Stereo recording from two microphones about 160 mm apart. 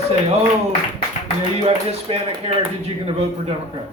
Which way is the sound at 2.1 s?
40° right (ahead or behind).